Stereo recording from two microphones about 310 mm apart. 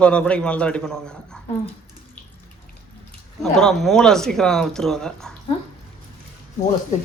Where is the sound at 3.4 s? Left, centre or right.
Centre.